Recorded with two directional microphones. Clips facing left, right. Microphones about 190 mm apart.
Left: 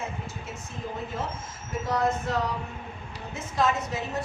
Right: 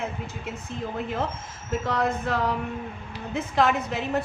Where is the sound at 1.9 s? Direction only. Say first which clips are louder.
Left 1 dB; 60° right (ahead or behind).